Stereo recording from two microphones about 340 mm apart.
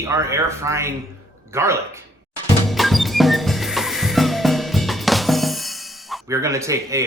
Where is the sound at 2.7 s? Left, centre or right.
Centre.